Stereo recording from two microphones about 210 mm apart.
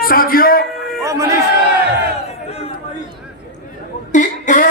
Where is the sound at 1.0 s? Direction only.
15° right (ahead or behind).